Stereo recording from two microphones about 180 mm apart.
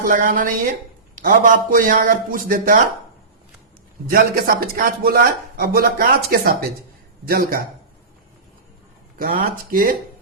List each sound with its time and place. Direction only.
0.1 s a man's voice: 50° right (ahead or behind)
4.1 s a man's voice: 55° right (ahead or behind)
9.1 s a man's voice: 50° right (ahead or behind)